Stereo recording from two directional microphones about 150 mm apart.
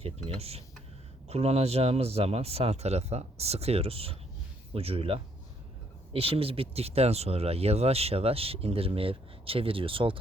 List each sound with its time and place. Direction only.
0.3 s speech: 40° right (ahead or behind)